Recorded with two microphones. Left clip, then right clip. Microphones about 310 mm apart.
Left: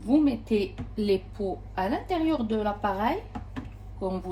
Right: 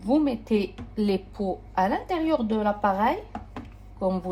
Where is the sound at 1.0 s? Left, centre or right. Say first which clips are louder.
Even; centre.